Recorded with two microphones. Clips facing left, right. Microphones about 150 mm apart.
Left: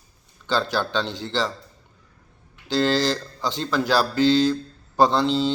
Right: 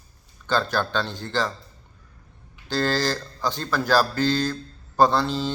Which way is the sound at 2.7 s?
20° left (ahead or behind).